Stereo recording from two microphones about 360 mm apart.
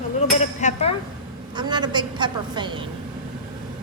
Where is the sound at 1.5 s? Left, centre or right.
Centre.